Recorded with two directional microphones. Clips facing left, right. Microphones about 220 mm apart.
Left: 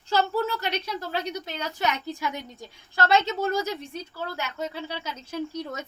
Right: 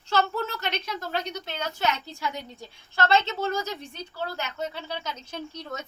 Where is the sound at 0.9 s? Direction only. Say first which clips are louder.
Left 1 dB; 10° left (ahead or behind).